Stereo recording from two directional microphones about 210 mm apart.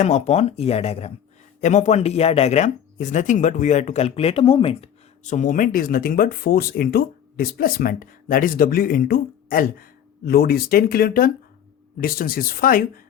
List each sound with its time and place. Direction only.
0.0 s speech: 30° left (ahead or behind)